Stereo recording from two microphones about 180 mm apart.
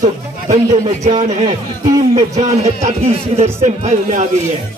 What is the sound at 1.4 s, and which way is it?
Speech, 25° right (ahead or behind).